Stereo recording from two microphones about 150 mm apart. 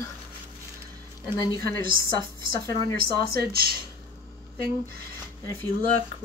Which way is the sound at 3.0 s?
90° right.